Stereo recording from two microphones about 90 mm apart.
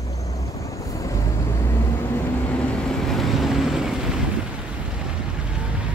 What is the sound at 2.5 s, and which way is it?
Vehicle, 10° left (ahead or behind).